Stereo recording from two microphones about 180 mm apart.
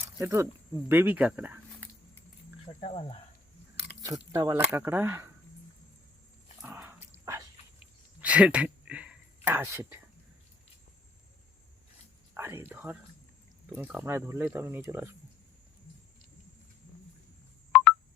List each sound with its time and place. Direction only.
0.0 s snake: 15° right (ahead or behind)
0.9 s speech: 10° right (ahead or behind)
2.8 s speech: 30° left (ahead or behind)
4.0 s speech: 20° right (ahead or behind)
6.6 s dog: 10° right (ahead or behind)
8.2 s speech: 5° right (ahead or behind)
12.3 s speech: 15° right (ahead or behind)
17.7 s telephone dialing: 5° left (ahead or behind)